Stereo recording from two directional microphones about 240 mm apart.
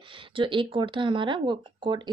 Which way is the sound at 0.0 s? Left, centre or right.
Right.